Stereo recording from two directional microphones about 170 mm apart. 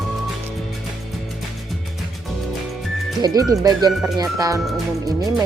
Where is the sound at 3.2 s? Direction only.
20° right (ahead or behind).